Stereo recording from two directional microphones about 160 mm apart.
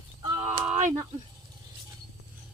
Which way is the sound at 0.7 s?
50° right (ahead or behind).